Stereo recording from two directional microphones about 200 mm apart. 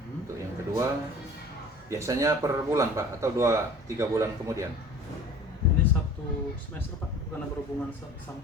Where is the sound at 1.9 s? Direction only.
15° right (ahead or behind).